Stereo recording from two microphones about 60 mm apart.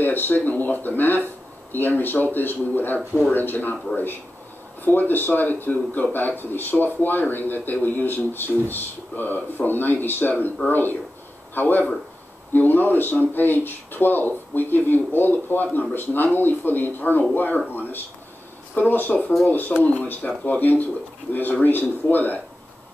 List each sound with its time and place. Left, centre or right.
0.0 s a man's voice: left